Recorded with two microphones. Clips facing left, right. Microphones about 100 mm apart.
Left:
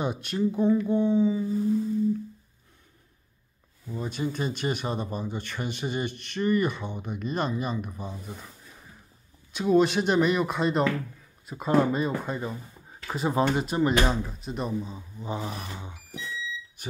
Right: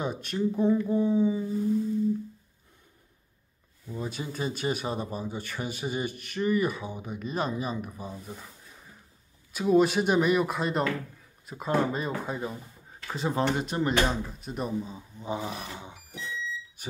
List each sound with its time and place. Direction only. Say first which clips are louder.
0.0 s speech: left 2 dB; centre (ahead or behind)
3.9 s speech: left 4 dB; 5° right (ahead or behind)
9.5 s speech: left 1 dB; 5° right (ahead or behind)
13.0 s speech: left 3 dB; 10° left (ahead or behind)
14.8 s a man's voice: even; 20° left (ahead or behind)
15.4 s speech: even; 5° right (ahead or behind)